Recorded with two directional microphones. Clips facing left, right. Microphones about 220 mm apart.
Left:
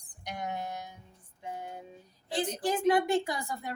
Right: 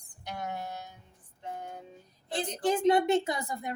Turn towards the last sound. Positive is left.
turn(degrees=-20)  # may be behind; listen again after turning